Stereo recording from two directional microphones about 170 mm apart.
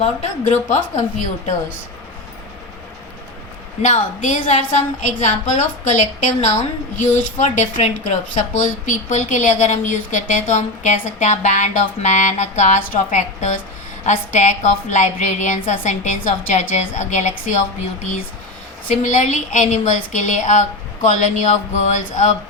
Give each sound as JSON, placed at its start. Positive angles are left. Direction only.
{"t": 0.0, "sound": "speech", "side_deg": 40}
{"t": 3.8, "sound": "speech", "side_deg": 45}